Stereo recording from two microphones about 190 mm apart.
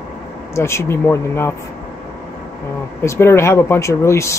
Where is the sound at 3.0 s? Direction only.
15° left (ahead or behind).